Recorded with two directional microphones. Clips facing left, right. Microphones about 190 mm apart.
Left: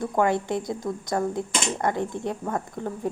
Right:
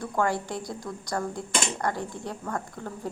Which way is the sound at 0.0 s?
20° left (ahead or behind).